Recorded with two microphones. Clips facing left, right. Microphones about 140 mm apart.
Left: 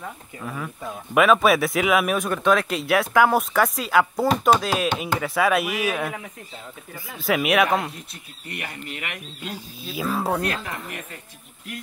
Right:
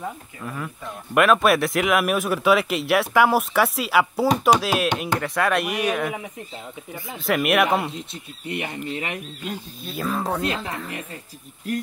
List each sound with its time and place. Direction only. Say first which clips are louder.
0.4 s speech: left 2 dB; centre (ahead or behind)
7.2 s speech: even; centre (ahead or behind)
7.9 s speech: right 6 dB; 25° right (ahead or behind)
9.5 s speech: right 1 dB; 5° left (ahead or behind)
10.4 s speech: right 1 dB; 20° right (ahead or behind)